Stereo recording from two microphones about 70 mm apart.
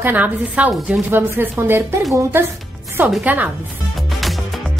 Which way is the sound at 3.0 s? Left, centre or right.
Right.